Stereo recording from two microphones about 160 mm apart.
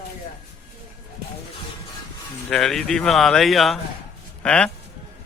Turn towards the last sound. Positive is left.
turn(degrees=5)  # may be behind; listen again after turning